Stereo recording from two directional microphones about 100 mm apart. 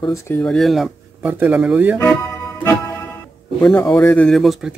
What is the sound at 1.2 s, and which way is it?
Speech, 15° right (ahead or behind).